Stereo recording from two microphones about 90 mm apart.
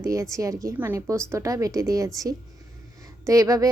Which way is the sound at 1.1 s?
35° right (ahead or behind).